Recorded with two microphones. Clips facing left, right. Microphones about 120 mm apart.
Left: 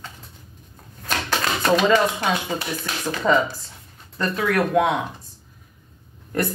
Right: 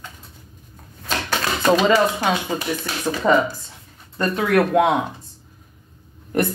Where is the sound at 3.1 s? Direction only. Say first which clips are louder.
Right 2 dB; 25° right (ahead or behind).